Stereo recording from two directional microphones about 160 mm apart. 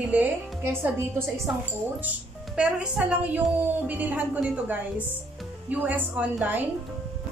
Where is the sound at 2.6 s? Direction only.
5° right (ahead or behind).